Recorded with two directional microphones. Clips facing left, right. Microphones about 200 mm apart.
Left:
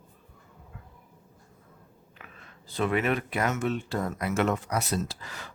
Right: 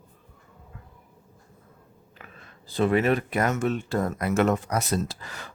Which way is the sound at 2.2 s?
35° right (ahead or behind).